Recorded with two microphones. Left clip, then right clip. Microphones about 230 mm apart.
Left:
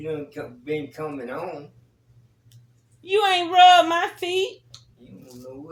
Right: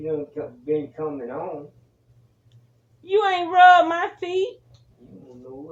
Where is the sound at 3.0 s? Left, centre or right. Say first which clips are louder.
Even; centre.